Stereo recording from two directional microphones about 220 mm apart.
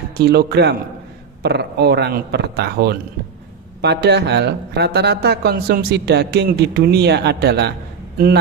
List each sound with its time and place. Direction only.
0.2 s speech: 45° right (ahead or behind)